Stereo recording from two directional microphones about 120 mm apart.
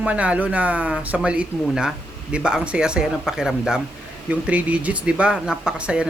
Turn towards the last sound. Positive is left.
turn(degrees=-10)  # may be behind; listen again after turning